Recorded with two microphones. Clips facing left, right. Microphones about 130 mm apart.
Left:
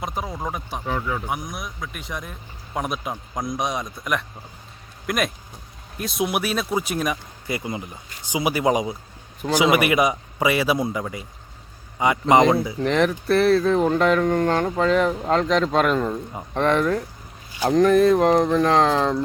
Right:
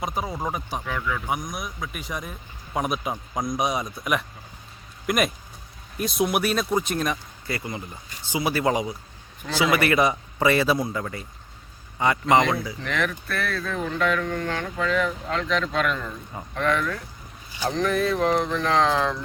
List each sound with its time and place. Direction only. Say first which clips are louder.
0.0 s speech: even; centre (ahead or behind)
0.9 s speech: left 4 dB; 30° left (ahead or behind)
1.3 s a man's voice: even; centre (ahead or behind)
12.2 s speech: left 5 dB; 25° left (ahead or behind); by 19.1 s 40° left (ahead or behind)